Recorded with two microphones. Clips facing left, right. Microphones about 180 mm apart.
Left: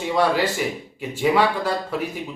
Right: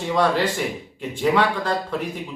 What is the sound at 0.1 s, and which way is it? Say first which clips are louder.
Speech: even; 5° left (ahead or behind).